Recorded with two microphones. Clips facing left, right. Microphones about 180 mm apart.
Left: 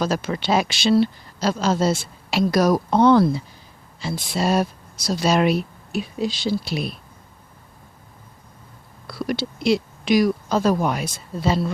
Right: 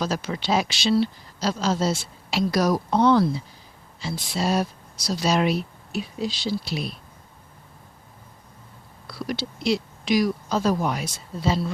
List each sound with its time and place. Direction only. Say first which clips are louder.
0.0 s speech: left 4 dB; 55° left (ahead or behind)
9.0 s speech: left 4 dB; 55° left (ahead or behind)